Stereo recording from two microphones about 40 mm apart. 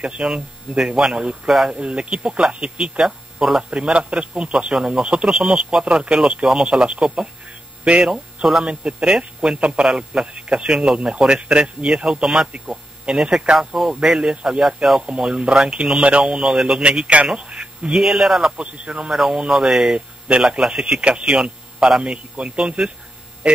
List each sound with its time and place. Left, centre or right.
0.0 s speech: right
3.7 s speech: right
14.3 s speech: right
16.8 s speech: right
17.9 s speech: centre
18.4 s speech: right
19.1 s speech: centre